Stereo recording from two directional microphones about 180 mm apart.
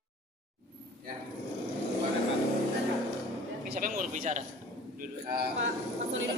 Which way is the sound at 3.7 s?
50° right (ahead or behind).